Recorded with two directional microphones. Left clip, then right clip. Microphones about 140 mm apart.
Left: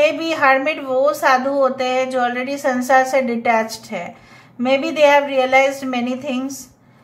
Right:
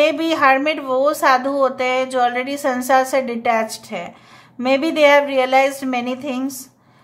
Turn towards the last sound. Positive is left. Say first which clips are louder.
# left 1 dB
turn(degrees=-30)  # may be behind; listen again after turning